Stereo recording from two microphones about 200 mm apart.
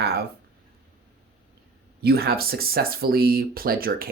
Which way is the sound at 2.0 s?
50° right (ahead or behind).